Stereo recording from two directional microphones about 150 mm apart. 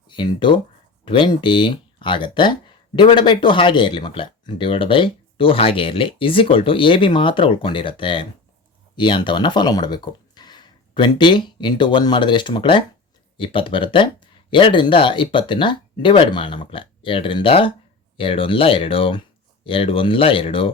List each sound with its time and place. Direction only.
0.1 s speech: 30° left (ahead or behind)